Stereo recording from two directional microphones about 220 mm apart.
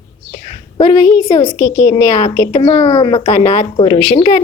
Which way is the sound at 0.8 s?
20° left (ahead or behind).